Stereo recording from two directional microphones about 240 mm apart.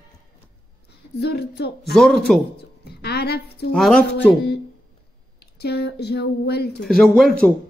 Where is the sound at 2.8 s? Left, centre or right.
Left.